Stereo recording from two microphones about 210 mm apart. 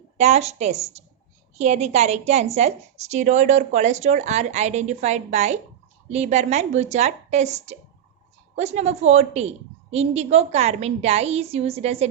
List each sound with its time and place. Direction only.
0.2 s a woman's voice: 30° right (ahead or behind)